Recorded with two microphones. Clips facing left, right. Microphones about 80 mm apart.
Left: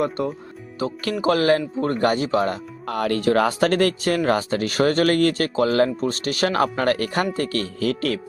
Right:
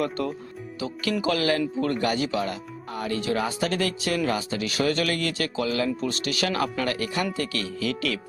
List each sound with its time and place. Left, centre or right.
0.8 s speech: left
2.8 s speech: left